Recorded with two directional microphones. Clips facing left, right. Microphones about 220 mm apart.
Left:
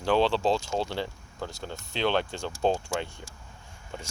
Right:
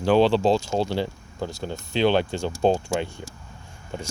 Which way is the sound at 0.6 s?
35° right (ahead or behind).